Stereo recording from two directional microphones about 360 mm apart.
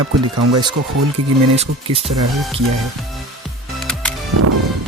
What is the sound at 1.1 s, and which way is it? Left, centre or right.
Speech, centre.